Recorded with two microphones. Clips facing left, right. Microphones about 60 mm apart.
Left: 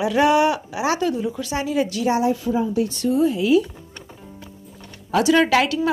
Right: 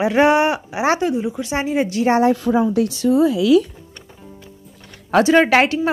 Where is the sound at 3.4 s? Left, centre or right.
Right.